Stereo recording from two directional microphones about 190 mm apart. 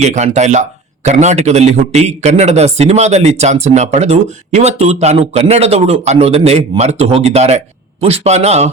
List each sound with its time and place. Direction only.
0.0 s a man's voice: 35° right (ahead or behind)